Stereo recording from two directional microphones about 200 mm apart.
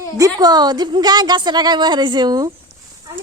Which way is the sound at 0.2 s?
20° right (ahead or behind).